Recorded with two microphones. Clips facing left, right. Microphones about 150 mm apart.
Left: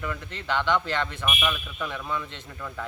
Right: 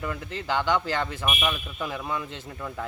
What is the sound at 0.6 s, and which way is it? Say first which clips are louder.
Speech: left 2 dB; 10° right (ahead or behind).